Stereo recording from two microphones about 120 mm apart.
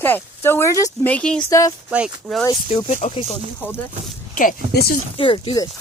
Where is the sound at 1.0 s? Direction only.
10° left (ahead or behind).